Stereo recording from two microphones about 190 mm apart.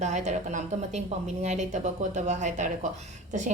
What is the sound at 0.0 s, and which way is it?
A woman's voice, 40° right (ahead or behind).